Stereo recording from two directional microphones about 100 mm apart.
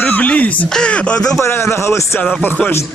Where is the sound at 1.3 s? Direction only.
25° left (ahead or behind).